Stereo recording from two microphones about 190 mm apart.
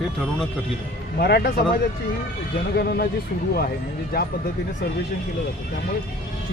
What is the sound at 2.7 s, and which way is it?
Speech, 55° left (ahead or behind).